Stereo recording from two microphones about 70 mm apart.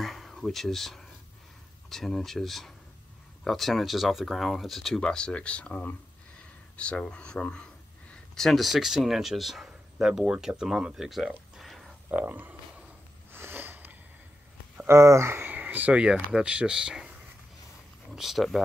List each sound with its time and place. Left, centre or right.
0.0 s a sound: centre
1.9 s speech: centre
11.5 s a sound: centre
12.1 s speech: right
13.3 s sniff: right
14.9 s speech: right
15.5 s speech: right
18.1 s speech: centre